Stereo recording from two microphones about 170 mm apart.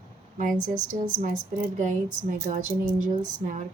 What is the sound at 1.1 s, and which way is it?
A woman's voice, 50° right (ahead or behind).